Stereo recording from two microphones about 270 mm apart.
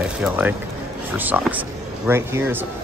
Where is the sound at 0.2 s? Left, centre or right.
Centre.